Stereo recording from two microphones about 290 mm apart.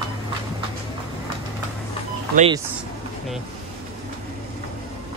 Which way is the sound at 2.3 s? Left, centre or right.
Centre.